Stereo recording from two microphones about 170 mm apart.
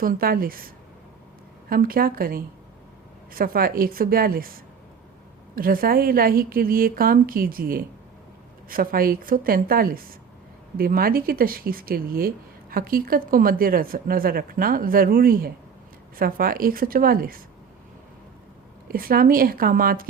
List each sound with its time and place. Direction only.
0.0 s speech: 60° right (ahead or behind)
1.7 s speech: 60° right (ahead or behind)
18.9 s speech: 60° right (ahead or behind)